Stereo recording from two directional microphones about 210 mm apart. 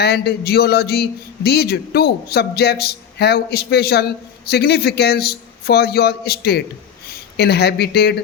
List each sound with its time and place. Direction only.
0.0 s speech: 50° left (ahead or behind)